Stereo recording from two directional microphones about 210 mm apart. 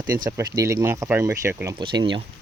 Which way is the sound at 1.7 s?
20° right (ahead or behind).